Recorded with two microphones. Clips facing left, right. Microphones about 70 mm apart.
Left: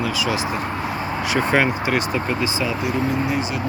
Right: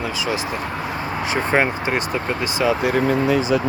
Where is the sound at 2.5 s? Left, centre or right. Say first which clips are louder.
Right 5 dB; right.